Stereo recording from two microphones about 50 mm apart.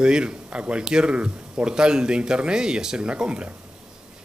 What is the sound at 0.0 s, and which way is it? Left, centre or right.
Speech, centre.